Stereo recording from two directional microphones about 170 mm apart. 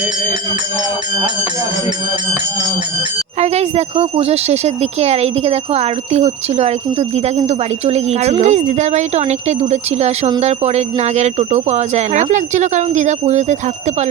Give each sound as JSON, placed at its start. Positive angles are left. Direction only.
{"t": 3.4, "sound": "speech", "side_deg": -40}